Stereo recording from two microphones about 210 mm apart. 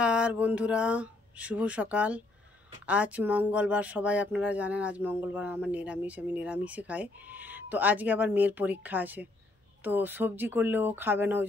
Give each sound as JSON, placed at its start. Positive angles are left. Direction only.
{"t": 0.0, "sound": "speech", "side_deg": -5}